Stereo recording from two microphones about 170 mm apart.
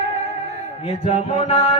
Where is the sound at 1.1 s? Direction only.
35° left (ahead or behind).